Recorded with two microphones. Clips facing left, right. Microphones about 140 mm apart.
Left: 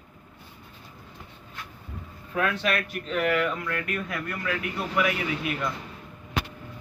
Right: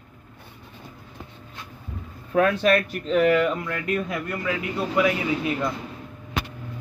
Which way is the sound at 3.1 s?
25° right (ahead or behind).